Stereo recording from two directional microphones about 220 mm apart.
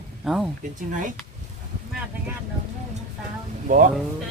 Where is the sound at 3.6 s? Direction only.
40° right (ahead or behind).